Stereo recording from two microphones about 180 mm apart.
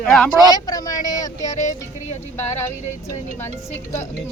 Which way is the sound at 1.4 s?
40° left (ahead or behind).